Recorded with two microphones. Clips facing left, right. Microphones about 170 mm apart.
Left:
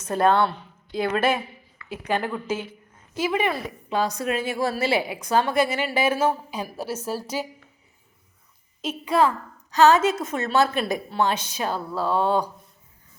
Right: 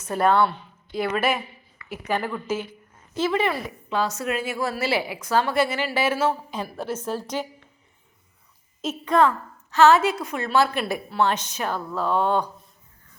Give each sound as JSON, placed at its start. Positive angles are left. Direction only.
{"t": 0.0, "sound": "a woman's voice", "side_deg": 30}
{"t": 8.8, "sound": "a woman's voice", "side_deg": 0}
{"t": 9.7, "sound": "a woman's voice", "side_deg": 15}